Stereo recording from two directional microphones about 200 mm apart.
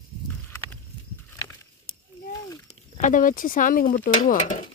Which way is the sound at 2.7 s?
40° left (ahead or behind).